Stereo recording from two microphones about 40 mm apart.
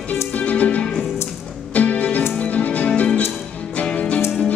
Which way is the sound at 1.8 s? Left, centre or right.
Left.